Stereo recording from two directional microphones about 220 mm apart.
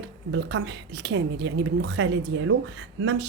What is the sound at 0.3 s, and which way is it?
A woman's voice, 50° right (ahead or behind).